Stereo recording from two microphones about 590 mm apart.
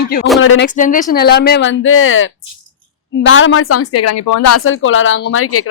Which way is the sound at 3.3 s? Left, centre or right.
Centre.